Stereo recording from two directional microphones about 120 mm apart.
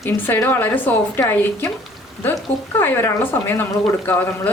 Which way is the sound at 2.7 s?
20° left (ahead or behind).